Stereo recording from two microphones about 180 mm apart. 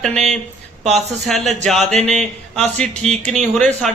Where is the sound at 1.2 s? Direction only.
Centre (ahead or behind).